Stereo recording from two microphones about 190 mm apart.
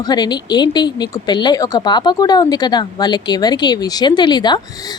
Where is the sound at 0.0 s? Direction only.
20° left (ahead or behind).